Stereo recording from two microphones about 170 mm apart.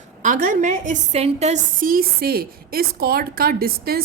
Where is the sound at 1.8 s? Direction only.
60° right (ahead or behind).